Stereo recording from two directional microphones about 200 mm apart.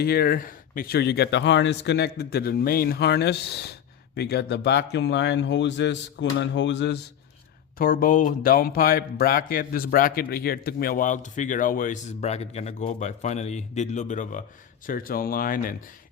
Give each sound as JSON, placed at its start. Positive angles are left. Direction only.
{"t": 0.0, "sound": "speech", "side_deg": 50}
{"t": 7.8, "sound": "speech", "side_deg": 45}